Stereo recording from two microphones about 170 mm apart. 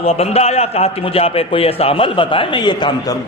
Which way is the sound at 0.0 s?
35° left (ahead or behind).